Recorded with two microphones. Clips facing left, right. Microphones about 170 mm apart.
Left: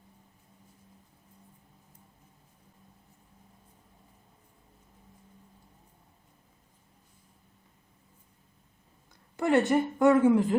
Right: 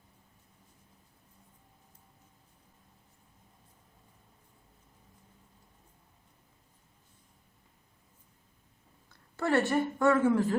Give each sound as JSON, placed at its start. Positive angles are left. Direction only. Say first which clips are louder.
{"t": 9.4, "sound": "a woman's voice", "louder": "left 3 dB", "side_deg": 20}